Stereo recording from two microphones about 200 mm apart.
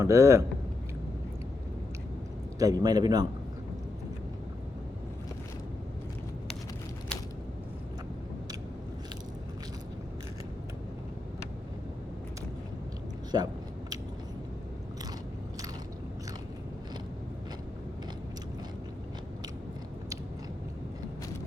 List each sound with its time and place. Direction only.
0.0 s a man's voice: 15° right (ahead or behind)
2.6 s a man's voice: 20° right (ahead or behind)
13.3 s a man's voice: 20° right (ahead or behind)